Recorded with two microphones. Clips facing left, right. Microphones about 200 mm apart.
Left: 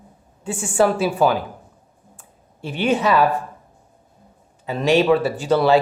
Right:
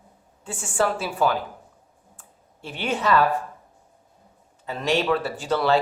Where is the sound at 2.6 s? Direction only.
15° left (ahead or behind).